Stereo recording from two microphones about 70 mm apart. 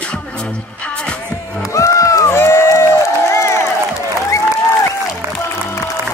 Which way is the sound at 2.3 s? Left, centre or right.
Left.